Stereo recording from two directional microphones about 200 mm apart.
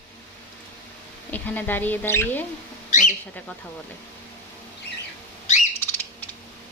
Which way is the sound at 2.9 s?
40° left (ahead or behind).